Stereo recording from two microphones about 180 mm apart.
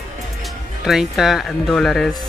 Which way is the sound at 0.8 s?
Centre (ahead or behind).